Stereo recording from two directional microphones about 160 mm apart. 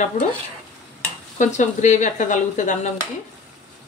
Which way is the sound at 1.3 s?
50° left (ahead or behind).